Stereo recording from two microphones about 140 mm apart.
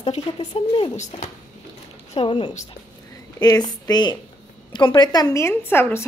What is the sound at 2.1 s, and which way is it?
A woman's voice, 35° left (ahead or behind).